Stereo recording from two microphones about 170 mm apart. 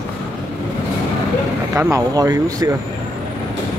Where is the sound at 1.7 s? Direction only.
15° right (ahead or behind).